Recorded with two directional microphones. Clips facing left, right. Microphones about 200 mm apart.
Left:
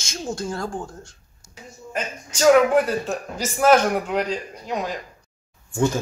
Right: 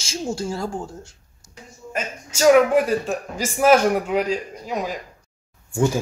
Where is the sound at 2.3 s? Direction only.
10° right (ahead or behind).